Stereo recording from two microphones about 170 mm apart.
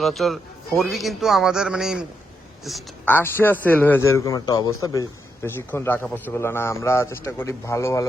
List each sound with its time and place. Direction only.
0.0 s a man's voice: centre (ahead or behind)
3.1 s a man's voice: 15° left (ahead or behind)